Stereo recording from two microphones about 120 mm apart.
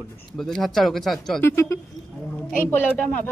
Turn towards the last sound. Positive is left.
turn(degrees=10)  # may be behind; listen again after turning